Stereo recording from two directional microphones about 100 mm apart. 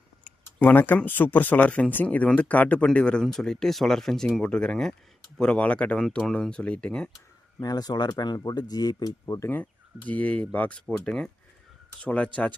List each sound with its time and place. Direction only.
0.3 s speech: 15° left (ahead or behind)
7.6 s speech: 40° left (ahead or behind)
9.5 s speech: 15° left (ahead or behind)